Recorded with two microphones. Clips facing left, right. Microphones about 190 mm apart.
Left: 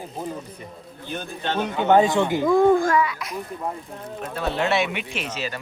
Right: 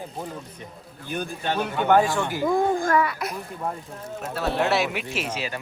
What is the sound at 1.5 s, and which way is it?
Speech, 20° left (ahead or behind).